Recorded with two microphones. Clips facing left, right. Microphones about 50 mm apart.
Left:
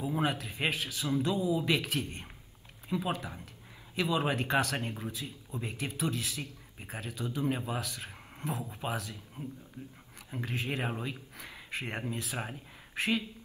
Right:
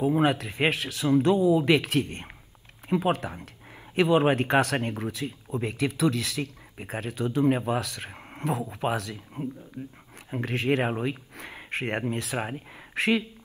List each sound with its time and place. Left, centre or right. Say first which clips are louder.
0.0 s speech: right 9 dB; right
8.1 s a sound: right 7 dB; right
8.5 s speech: right 8 dB; right
9.8 s speech: right 7 dB; right
10.4 s speech: right 9 dB; right